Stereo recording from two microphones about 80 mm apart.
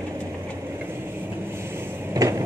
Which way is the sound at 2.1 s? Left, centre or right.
Right.